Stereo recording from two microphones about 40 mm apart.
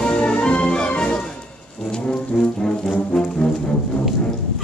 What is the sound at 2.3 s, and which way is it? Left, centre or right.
Brass instrument, centre.